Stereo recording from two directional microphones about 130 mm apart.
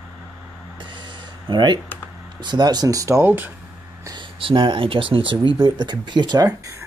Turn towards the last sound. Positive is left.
turn(degrees=-30)  # may be behind; listen again after turning